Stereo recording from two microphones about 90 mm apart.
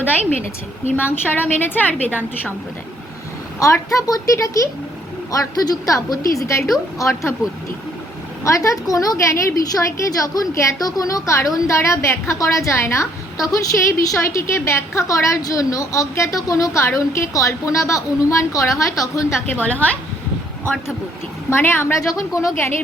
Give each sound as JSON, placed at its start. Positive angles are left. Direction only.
{"t": 0.9, "sound": "a woman's voice", "side_deg": 25}
{"t": 3.6, "sound": "a woman's voice", "side_deg": 35}
{"t": 8.4, "sound": "a woman's voice", "side_deg": 35}
{"t": 19.6, "sound": "a woman's voice", "side_deg": 15}
{"t": 21.5, "sound": "a woman's voice", "side_deg": 25}